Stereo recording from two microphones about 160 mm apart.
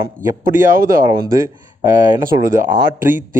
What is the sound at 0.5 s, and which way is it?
A man's voice, 15° right (ahead or behind).